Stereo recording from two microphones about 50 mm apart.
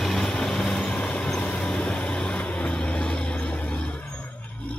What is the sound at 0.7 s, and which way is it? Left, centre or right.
Vehicle, left.